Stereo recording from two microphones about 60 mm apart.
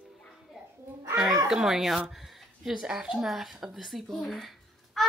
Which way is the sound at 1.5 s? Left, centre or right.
Centre.